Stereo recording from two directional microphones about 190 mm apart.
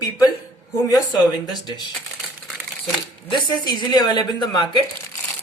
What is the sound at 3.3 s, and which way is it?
Speech, 20° left (ahead or behind).